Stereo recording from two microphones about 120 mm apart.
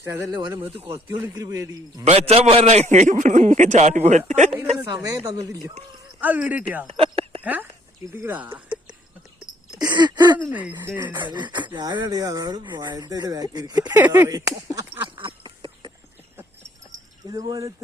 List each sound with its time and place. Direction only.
0.0 s speech: 25° right (ahead or behind)
2.0 s a man's voice: 55° right (ahead or behind); by 4.5 s 80° right
4.9 s speech: 30° right (ahead or behind)
6.1 s speech: 15° right (ahead or behind)
6.8 s a sound: 55° right (ahead or behind)
7.4 s speech: 15° right (ahead or behind)
9.9 s speech: 35° right (ahead or behind)
10.3 s speech: 15° right (ahead or behind)
11.3 s speech: 40° right (ahead or behind)
13.9 s speech: 15° right (ahead or behind)
14.3 s speech: 30° right (ahead or behind)
15.2 s a sound: 45° right (ahead or behind)
17.2 s speech: 30° right (ahead or behind)